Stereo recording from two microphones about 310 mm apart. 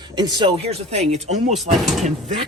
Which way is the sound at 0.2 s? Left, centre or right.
Centre.